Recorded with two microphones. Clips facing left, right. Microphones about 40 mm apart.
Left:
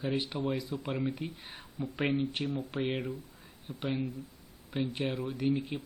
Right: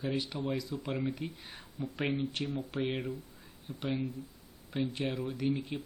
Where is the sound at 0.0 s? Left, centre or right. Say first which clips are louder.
Left 2 dB; left.